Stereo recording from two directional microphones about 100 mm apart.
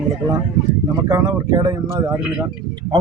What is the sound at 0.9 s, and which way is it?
Speech, 35° right (ahead or behind).